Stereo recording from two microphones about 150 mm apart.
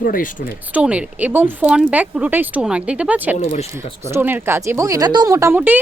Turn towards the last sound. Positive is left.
turn(degrees=-10)  # may be behind; listen again after turning